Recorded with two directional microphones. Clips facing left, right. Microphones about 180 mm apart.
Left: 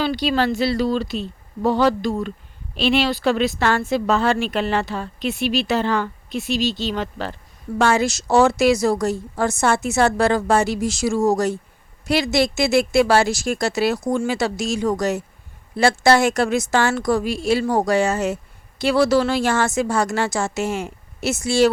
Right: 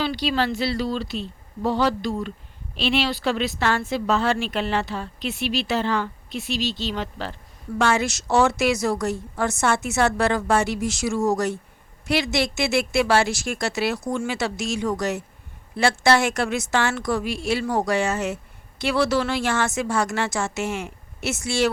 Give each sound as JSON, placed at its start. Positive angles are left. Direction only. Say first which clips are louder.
{"t": 0.0, "sound": "speech", "louder": "left 3 dB", "side_deg": 45}
{"t": 7.8, "sound": "a woman's voice", "louder": "left 3 dB", "side_deg": 35}